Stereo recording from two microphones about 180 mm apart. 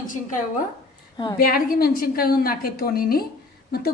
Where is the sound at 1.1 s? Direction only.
25° left (ahead or behind).